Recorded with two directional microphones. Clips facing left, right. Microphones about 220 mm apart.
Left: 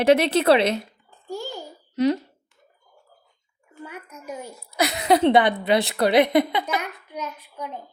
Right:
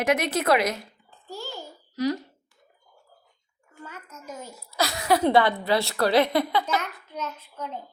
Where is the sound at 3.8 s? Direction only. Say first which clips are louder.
Left 4 dB; 15° left (ahead or behind).